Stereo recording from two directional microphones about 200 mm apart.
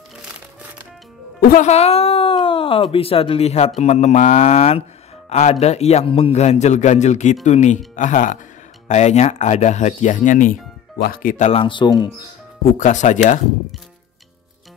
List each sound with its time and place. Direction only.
1.4 s speech: 40° left (ahead or behind); by 12.1 s 20° left (ahead or behind)
12.7 s speech: 40° left (ahead or behind)